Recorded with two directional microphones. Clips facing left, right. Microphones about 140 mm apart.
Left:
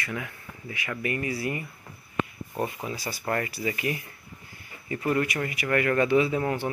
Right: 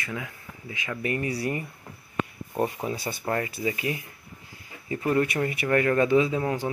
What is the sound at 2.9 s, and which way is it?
Speech, 20° right (ahead or behind).